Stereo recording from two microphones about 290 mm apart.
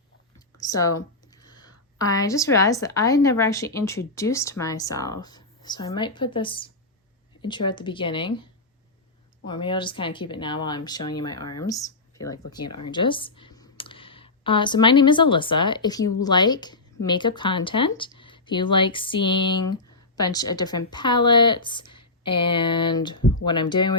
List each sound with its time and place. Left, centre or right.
0.3 s a woman's voice: centre
9.5 s a woman's voice: centre